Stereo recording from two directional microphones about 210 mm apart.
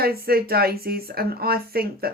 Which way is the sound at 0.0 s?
45° right (ahead or behind).